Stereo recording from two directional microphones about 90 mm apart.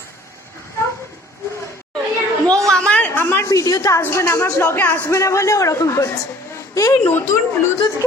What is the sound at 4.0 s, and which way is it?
A man's voice, 30° left (ahead or behind).